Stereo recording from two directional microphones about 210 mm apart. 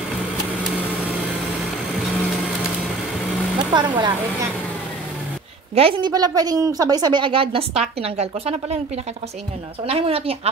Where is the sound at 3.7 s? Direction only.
20° right (ahead or behind).